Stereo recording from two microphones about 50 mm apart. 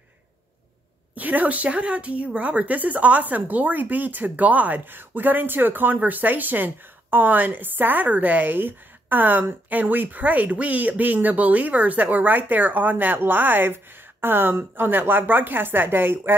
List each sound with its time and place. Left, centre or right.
1.1 s a woman's voice: right